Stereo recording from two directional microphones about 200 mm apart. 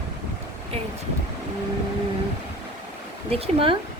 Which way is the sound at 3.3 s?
25° right (ahead or behind).